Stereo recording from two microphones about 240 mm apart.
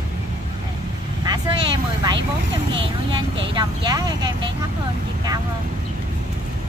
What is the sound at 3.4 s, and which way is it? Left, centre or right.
Speech, centre.